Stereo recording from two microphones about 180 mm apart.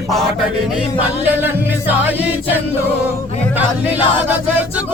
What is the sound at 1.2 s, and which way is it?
Music, 10° right (ahead or behind).